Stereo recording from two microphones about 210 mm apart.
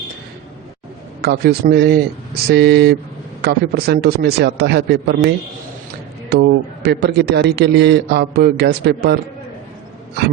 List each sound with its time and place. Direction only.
1.2 s a man's voice: 50° right (ahead or behind)
6.3 s a man's voice: 50° right (ahead or behind)